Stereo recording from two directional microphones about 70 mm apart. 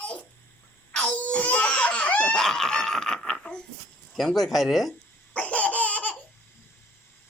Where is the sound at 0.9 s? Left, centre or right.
Centre.